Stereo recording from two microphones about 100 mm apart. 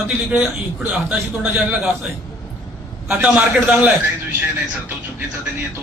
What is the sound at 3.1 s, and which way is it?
Speech, 15° right (ahead or behind).